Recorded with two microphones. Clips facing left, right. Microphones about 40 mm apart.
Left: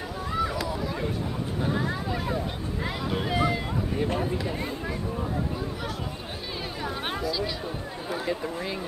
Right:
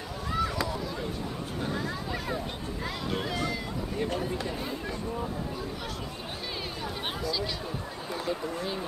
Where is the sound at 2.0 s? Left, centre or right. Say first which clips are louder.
Left 4 dB; centre.